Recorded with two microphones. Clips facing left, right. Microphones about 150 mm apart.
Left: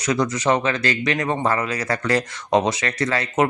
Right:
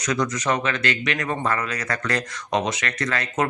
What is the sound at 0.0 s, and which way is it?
Speech, 30° left (ahead or behind).